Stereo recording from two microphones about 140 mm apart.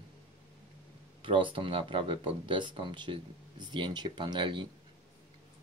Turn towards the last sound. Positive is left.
turn(degrees=-35)  # may be behind; listen again after turning